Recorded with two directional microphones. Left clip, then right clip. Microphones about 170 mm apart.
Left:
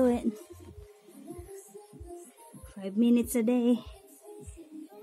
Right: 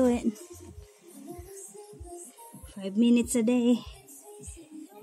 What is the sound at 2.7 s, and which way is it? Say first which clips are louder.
Speech: right 2 dB; 10° right (ahead or behind).